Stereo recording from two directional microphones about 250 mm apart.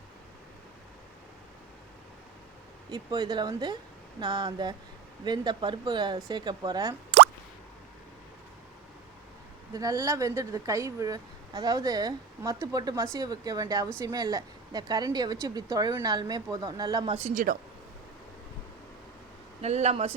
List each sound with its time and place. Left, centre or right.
2.9 s speech: centre
9.7 s speech: centre; by 17.6 s right
19.6 s speech: right